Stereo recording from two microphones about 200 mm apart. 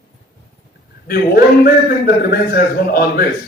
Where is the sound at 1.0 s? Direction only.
50° left (ahead or behind).